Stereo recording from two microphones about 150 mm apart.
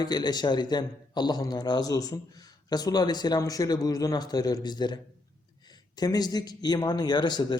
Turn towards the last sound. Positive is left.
turn(degrees=30)  # may be behind; listen again after turning